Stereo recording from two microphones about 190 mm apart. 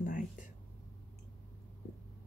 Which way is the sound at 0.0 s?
40° left (ahead or behind).